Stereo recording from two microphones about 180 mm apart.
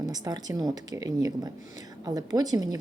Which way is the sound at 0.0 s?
20° right (ahead or behind).